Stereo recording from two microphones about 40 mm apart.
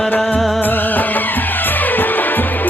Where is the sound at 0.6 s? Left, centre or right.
Left.